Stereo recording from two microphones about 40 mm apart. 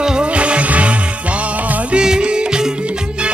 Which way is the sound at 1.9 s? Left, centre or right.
Right.